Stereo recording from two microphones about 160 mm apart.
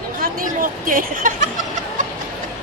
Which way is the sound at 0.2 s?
60° right (ahead or behind).